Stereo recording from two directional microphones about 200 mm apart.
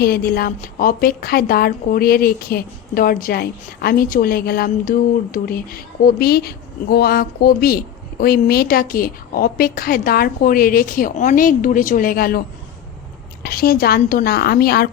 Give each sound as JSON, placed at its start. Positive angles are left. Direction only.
{"t": 0.0, "sound": "a woman's voice", "side_deg": 50}
{"t": 13.4, "sound": "a woman's voice", "side_deg": 50}